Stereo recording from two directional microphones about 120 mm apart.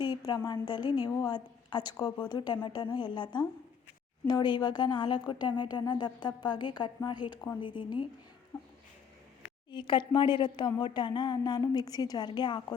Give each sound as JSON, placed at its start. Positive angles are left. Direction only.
{"t": 0.3, "sound": "a woman's voice", "side_deg": 35}
{"t": 9.7, "sound": "a woman's voice", "side_deg": 40}